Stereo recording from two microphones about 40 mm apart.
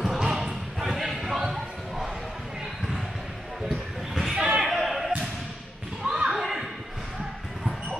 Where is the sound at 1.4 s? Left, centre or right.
Centre.